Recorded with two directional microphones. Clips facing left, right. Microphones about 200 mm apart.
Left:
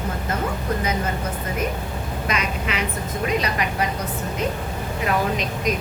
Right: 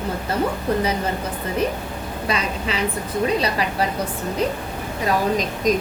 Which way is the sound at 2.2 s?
35° right (ahead or behind).